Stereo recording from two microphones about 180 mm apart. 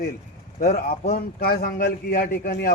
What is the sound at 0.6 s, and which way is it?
A man's voice, 55° left (ahead or behind).